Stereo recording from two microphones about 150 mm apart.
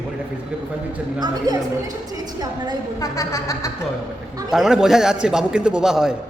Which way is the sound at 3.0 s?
20° left (ahead or behind).